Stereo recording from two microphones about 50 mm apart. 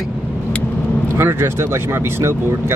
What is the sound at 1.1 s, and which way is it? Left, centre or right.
Speech, right.